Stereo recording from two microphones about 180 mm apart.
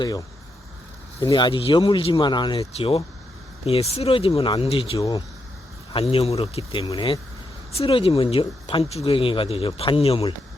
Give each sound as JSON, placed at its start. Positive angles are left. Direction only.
{"t": 0.0, "sound": "speech", "side_deg": 20}
{"t": 4.9, "sound": "speech", "side_deg": 20}
{"t": 5.9, "sound": "speech", "side_deg": 30}